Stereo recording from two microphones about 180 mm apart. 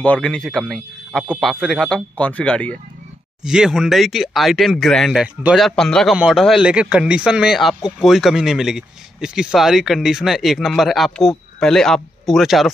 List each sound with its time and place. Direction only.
0.0 s a man's voice: 5° left (ahead or behind)